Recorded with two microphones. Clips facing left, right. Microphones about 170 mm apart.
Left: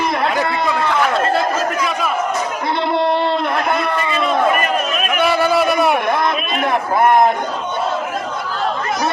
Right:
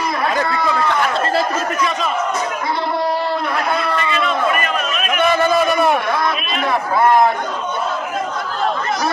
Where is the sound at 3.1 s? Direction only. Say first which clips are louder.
Left 3 dB; 25° left (ahead or behind).